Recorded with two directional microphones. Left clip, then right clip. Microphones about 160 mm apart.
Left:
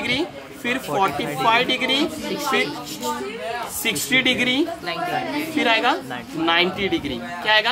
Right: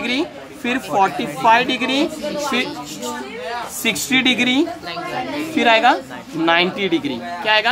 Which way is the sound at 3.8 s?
55° right (ahead or behind).